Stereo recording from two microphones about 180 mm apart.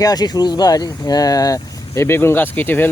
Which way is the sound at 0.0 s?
20° left (ahead or behind).